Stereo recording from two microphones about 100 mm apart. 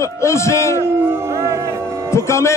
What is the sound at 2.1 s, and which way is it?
Speech, 30° left (ahead or behind).